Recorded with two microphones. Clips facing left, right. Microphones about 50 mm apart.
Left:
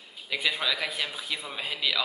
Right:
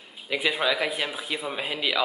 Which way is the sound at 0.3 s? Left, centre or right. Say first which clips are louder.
Right 4 dB; centre.